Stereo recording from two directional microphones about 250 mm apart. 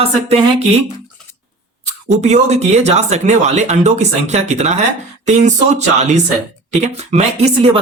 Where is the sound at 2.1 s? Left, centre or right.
Right.